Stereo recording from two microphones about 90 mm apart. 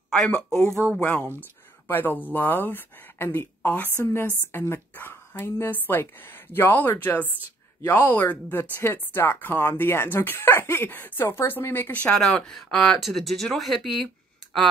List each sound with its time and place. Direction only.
0.1 s speech: 5° left (ahead or behind)
1.0 s speech: 25° left (ahead or behind); by 14.0 s centre (ahead or behind)